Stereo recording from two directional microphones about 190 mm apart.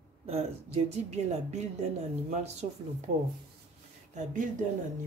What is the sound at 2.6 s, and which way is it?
Speech, 40° right (ahead or behind).